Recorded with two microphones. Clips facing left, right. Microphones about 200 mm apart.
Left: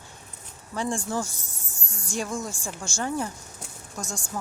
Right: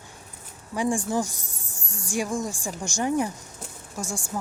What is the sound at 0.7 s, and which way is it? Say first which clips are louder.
A woman's voice: right 3 dB; 15° right (ahead or behind).